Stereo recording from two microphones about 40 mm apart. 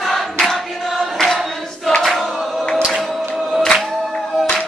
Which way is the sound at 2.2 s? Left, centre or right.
Centre.